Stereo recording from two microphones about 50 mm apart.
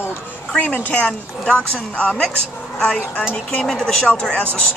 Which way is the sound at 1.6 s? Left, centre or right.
Left.